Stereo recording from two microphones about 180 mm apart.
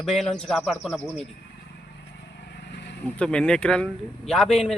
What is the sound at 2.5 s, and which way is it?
Vehicle, 70° left (ahead or behind).